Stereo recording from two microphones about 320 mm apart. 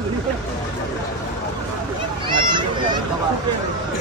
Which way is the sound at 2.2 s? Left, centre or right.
Centre.